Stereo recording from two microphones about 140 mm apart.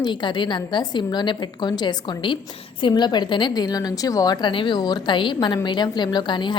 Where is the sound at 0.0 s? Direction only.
35° left (ahead or behind).